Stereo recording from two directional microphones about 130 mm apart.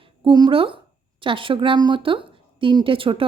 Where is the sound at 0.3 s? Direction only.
35° right (ahead or behind).